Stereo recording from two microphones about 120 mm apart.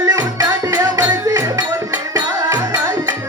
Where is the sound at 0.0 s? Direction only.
30° right (ahead or behind).